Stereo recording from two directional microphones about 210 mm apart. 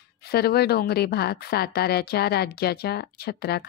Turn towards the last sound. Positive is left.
turn(degrees=50)  # may be behind; listen again after turning